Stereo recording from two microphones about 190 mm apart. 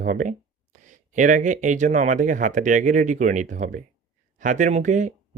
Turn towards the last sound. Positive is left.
turn(degrees=-40)  # may be behind; listen again after turning